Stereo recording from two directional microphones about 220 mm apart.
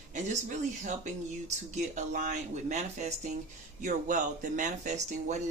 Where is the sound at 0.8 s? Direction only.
30° right (ahead or behind).